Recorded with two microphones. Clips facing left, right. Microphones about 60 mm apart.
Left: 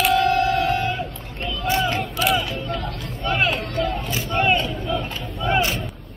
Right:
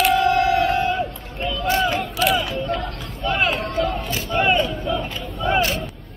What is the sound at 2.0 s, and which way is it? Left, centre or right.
Crowd, centre.